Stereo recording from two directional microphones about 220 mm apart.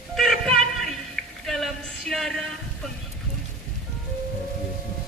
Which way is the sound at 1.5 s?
Centre (ahead or behind).